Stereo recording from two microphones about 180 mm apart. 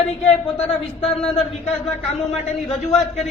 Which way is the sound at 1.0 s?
35° left (ahead or behind).